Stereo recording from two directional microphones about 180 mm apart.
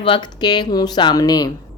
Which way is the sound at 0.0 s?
25° left (ahead or behind).